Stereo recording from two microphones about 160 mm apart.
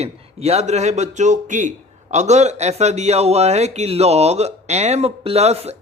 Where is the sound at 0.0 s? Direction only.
40° right (ahead or behind).